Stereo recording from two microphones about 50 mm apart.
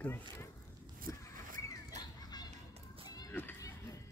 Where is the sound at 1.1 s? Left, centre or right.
Left.